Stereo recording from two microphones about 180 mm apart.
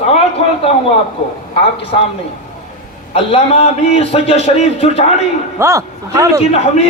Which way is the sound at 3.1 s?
35° left (ahead or behind).